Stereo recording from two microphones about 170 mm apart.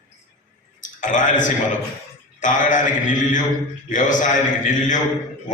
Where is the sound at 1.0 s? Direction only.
45° left (ahead or behind).